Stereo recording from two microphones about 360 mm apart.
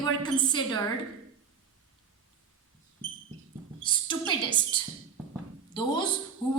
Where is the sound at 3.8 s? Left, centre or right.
Centre.